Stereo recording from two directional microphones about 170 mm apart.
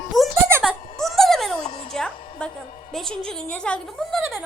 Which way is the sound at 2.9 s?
5° left (ahead or behind).